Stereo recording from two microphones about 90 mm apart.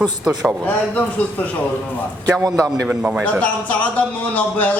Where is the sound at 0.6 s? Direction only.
20° left (ahead or behind).